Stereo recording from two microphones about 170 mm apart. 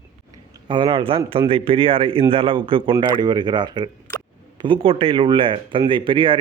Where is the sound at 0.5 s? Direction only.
30° right (ahead or behind).